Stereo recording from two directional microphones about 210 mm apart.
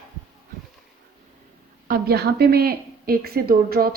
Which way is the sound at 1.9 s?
50° right (ahead or behind).